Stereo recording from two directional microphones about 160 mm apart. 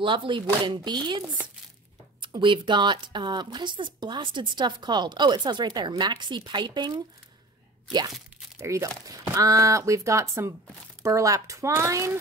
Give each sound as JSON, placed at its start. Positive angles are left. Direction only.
{"t": 0.0, "sound": "speech", "side_deg": -30}
{"t": 2.2, "sound": "speech", "side_deg": -30}
{"t": 8.5, "sound": "speech", "side_deg": -20}